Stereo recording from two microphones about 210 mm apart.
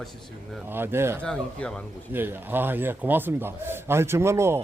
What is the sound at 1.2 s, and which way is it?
Speech, 5° left (ahead or behind).